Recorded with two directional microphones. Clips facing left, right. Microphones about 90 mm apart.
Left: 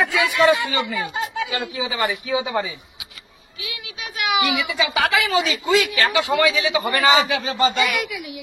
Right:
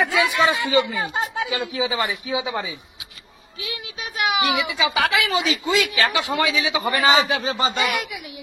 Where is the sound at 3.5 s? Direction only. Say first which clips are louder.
Right 2 dB; 35° right (ahead or behind).